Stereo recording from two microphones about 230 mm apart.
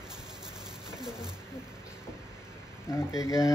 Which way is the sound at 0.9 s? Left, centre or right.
Centre.